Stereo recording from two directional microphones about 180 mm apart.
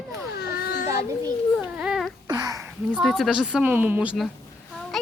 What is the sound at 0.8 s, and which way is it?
Children playing, 15° right (ahead or behind).